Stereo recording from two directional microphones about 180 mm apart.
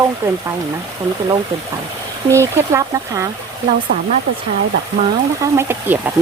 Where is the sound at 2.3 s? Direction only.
15° right (ahead or behind).